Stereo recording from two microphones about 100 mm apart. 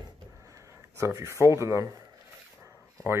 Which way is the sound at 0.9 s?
30° right (ahead or behind).